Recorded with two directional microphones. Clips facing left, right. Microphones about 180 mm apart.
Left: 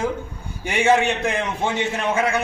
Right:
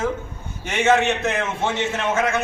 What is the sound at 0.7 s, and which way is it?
A man's voice, 10° left (ahead or behind).